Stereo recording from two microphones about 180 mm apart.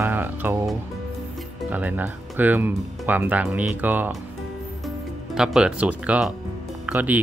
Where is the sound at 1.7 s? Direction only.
10° right (ahead or behind).